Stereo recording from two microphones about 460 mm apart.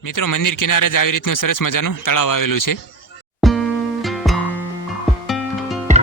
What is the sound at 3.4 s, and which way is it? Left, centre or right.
Music, centre.